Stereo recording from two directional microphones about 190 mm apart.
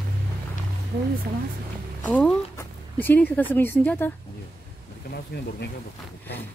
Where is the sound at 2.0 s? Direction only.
5° left (ahead or behind).